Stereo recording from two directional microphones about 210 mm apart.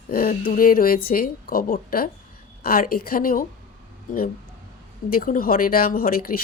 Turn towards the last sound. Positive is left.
turn(degrees=45)  # may be behind; listen again after turning